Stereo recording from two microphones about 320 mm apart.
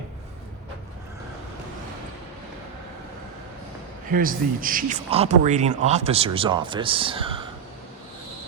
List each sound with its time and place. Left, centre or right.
4.1 s speech: right